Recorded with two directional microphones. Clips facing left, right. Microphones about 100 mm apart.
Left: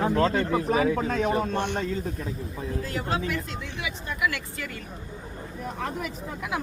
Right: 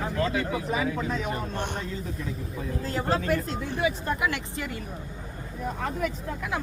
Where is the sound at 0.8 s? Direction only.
35° left (ahead or behind).